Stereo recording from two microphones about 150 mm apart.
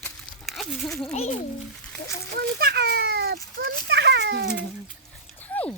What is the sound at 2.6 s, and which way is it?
A child's voice, 90° right.